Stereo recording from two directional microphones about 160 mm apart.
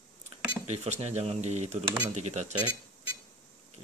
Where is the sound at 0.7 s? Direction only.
45° right (ahead or behind).